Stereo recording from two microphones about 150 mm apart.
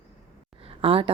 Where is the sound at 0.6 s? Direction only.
40° right (ahead or behind).